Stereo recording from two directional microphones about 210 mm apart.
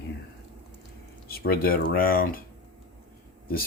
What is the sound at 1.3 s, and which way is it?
Speech, 45° left (ahead or behind).